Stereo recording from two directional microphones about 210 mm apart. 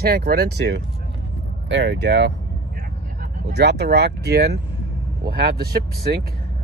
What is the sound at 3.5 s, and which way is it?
Speech, 50° right (ahead or behind).